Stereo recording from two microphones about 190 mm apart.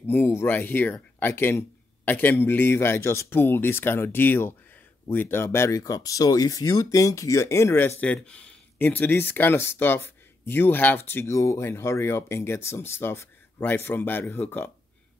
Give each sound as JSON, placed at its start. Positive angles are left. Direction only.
{"t": 0.0, "sound": "speech", "side_deg": 10}